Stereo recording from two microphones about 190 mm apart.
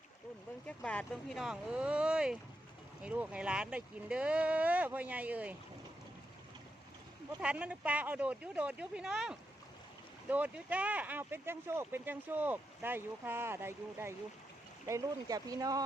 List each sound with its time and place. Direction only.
0.7 s speech: 5° left (ahead or behind)
7.4 s speech: 5° right (ahead or behind)